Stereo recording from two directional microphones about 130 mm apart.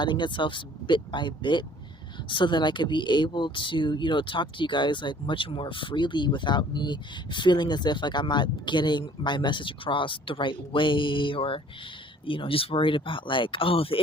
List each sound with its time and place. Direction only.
0.0 s speech: 35° left (ahead or behind)